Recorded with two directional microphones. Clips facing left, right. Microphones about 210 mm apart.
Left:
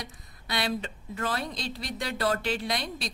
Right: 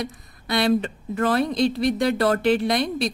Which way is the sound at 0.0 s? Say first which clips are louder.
Right 11 dB; 55° right (ahead or behind).